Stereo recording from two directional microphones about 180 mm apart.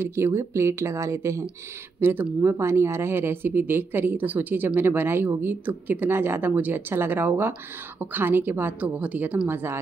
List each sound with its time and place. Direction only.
0.0 s speech: 15° right (ahead or behind)